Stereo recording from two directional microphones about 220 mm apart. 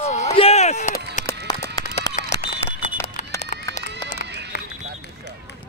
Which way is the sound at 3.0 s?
10° left (ahead or behind).